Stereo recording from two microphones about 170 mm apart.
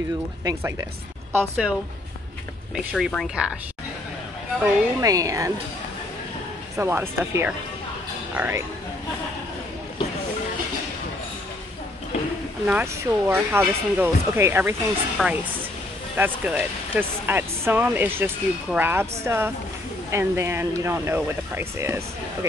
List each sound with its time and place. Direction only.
1.3 s speech: 15° right (ahead or behind)
2.7 s speech: centre (ahead or behind)
5.0 s speech: 20° right (ahead or behind)
6.8 s speech: 15° right (ahead or behind)
12.6 s speech: 10° right (ahead or behind)
15.2 s speech: centre (ahead or behind)
16.2 s speech: 10° right (ahead or behind)